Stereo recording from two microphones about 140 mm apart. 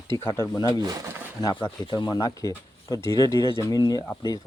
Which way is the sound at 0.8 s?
25° right (ahead or behind).